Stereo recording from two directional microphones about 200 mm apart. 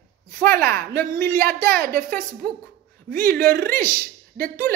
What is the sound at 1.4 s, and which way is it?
Speech, 50° right (ahead or behind).